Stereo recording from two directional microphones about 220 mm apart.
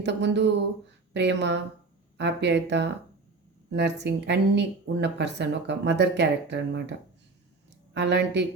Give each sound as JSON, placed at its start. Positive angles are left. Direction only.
{"t": 0.0, "sound": "speech", "side_deg": -50}
{"t": 7.9, "sound": "speech", "side_deg": -50}